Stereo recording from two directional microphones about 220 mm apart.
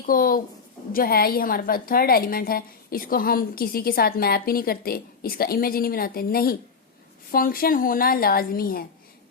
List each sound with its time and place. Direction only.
0.0 s a woman's voice: 40° left (ahead or behind)